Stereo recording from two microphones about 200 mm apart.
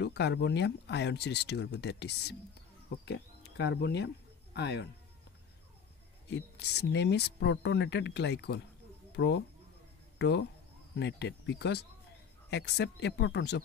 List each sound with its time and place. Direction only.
0.0 s speech: 60° left (ahead or behind)
6.3 s speech: 55° left (ahead or behind)